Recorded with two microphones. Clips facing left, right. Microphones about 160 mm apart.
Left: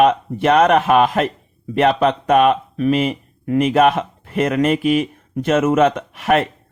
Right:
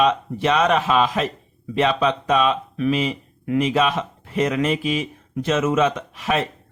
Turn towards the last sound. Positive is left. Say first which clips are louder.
# left 6 dB
turn(degrees=60)  # may be behind; listen again after turning